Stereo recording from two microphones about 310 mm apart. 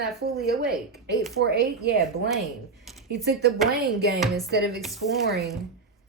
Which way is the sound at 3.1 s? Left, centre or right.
Right.